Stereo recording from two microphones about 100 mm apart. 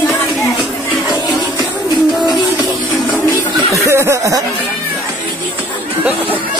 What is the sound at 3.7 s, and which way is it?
Snicker, 30° right (ahead or behind).